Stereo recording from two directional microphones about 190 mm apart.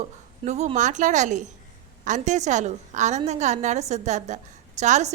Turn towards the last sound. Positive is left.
turn(degrees=-35)  # may be behind; listen again after turning